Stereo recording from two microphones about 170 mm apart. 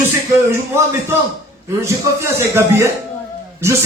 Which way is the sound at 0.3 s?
15° right (ahead or behind).